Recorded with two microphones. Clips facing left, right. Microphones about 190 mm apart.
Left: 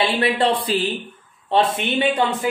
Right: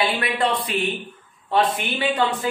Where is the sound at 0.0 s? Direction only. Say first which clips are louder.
Left 3 dB; 30° left (ahead or behind).